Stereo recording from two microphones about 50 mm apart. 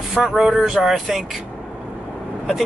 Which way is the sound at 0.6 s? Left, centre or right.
Centre.